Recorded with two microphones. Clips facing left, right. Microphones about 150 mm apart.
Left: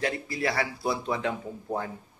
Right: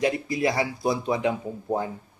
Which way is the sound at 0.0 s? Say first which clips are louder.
Right 5 dB; 20° right (ahead or behind).